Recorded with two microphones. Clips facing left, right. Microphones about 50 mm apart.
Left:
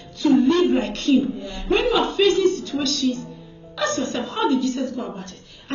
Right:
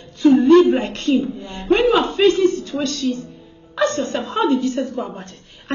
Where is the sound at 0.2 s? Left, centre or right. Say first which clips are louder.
Right 4 dB; right.